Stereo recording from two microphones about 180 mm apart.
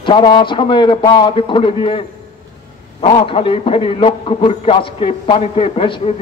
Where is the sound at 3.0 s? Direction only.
30° left (ahead or behind).